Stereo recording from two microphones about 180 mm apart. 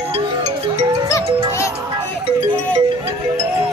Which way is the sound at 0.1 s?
35° right (ahead or behind).